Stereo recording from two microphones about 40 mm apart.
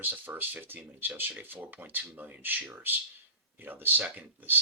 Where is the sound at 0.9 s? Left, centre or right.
Right.